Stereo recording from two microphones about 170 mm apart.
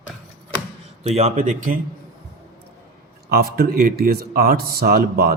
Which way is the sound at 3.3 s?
65° right (ahead or behind).